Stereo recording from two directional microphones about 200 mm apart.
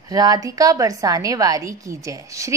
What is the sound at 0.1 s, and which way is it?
A woman's voice, 20° right (ahead or behind).